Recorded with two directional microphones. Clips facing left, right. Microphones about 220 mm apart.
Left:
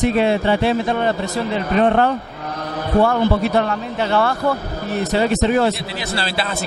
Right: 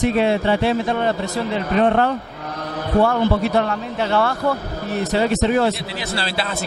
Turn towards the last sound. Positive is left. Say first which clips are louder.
# left 1 dB
turn(degrees=10)  # may be behind; listen again after turning